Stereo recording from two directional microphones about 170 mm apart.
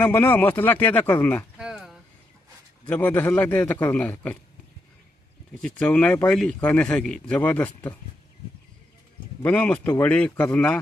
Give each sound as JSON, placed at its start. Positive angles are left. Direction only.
{"t": 0.0, "sound": "speech", "side_deg": 10}
{"t": 1.5, "sound": "a sound", "side_deg": -5}
{"t": 2.8, "sound": "speech", "side_deg": 10}
{"t": 5.6, "sound": "speech", "side_deg": 10}
{"t": 9.4, "sound": "speech", "side_deg": 10}